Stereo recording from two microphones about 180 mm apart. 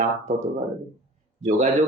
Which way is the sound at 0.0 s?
40° right (ahead or behind).